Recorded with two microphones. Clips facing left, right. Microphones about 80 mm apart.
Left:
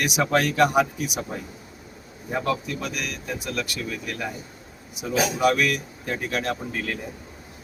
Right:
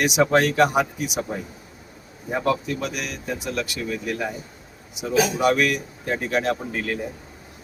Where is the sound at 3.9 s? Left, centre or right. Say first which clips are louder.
Right 4 dB; centre.